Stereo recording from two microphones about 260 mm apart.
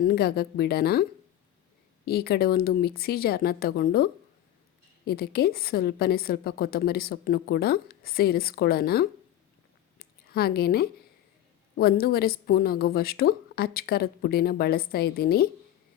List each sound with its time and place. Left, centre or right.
0.0 s a woman's voice: left
2.0 s a woman's voice: left
10.0 s a sound: left
11.8 s a woman's voice: left